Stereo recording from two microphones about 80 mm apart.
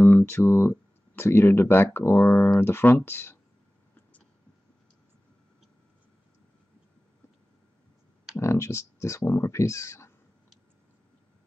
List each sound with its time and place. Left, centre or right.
0.0 s speech: left
8.4 s speech: left